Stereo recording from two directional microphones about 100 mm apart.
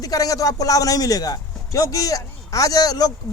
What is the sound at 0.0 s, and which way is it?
Speech, 35° left (ahead or behind).